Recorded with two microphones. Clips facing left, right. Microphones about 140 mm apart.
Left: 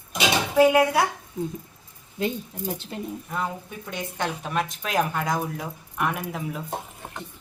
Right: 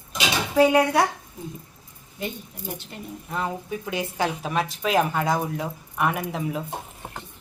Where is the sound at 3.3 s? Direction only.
5° right (ahead or behind).